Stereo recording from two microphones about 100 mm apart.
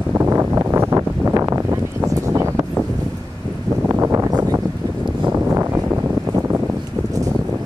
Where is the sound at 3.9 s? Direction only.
25° right (ahead or behind).